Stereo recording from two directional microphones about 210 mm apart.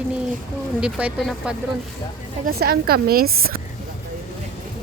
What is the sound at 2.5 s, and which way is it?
Speech, 45° right (ahead or behind).